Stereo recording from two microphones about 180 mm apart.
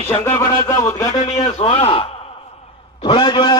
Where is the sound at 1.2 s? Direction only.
35° left (ahead or behind).